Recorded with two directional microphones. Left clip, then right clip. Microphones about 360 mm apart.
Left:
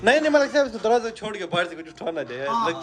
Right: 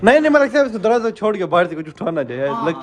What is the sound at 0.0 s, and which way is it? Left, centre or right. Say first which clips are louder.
A man's voice: right 6 dB; centre.